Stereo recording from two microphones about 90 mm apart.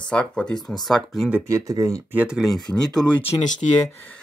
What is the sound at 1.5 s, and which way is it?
Speech, 40° right (ahead or behind).